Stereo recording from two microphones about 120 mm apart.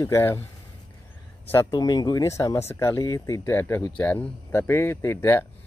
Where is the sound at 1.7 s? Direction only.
35° left (ahead or behind).